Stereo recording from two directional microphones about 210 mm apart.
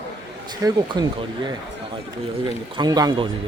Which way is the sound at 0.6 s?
15° right (ahead or behind).